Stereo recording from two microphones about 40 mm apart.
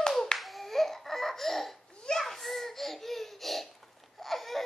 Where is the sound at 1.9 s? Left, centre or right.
Centre.